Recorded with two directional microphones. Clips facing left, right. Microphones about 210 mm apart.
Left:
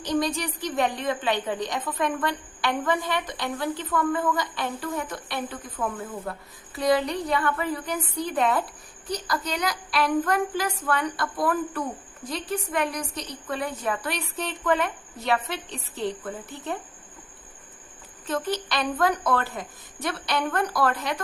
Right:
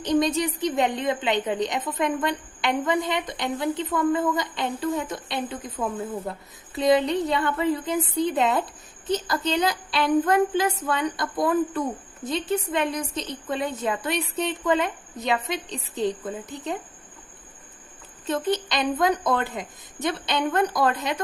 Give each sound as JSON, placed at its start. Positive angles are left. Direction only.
{"t": 0.0, "sound": "a woman's voice", "side_deg": -20}
{"t": 18.3, "sound": "a woman's voice", "side_deg": -20}